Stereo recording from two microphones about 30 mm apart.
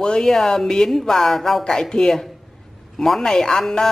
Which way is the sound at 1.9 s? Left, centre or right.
Centre.